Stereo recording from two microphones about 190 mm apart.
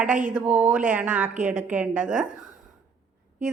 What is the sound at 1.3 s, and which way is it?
Speech, 40° right (ahead or behind).